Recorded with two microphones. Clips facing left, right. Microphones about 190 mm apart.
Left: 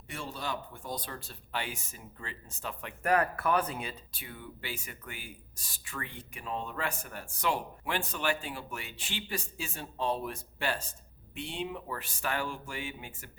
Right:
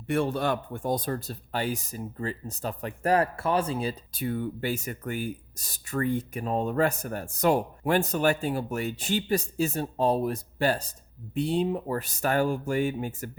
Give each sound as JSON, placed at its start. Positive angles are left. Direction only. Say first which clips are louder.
{"t": 0.1, "sound": "speech", "louder": "right 12 dB", "side_deg": -55}